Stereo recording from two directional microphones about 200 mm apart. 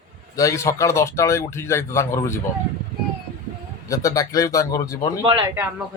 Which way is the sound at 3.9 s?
15° left (ahead or behind).